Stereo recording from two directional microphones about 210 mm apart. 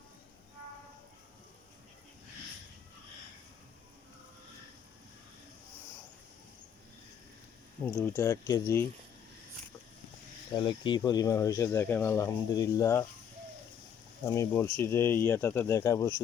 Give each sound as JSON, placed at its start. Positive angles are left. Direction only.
{"t": 7.9, "sound": "speech", "side_deg": 5}
{"t": 10.5, "sound": "speech", "side_deg": 20}
{"t": 14.3, "sound": "speech", "side_deg": 15}